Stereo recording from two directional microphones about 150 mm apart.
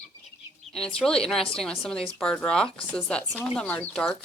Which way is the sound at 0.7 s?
5° left (ahead or behind).